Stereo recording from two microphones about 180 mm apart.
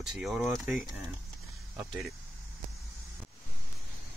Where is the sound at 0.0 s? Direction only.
Centre (ahead or behind).